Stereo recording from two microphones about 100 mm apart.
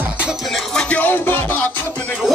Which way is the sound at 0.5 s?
10° left (ahead or behind).